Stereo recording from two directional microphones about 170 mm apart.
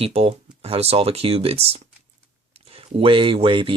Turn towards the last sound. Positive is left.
turn(degrees=-30)  # may be behind; listen again after turning